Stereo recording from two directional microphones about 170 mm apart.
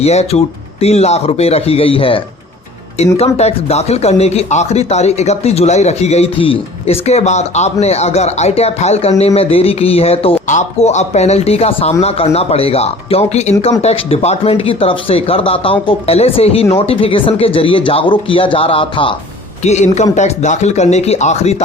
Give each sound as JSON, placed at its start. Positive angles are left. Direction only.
{"t": 0.0, "sound": "speech", "side_deg": 40}
{"t": 3.3, "sound": "speech", "side_deg": 40}
{"t": 19.6, "sound": "speech", "side_deg": 40}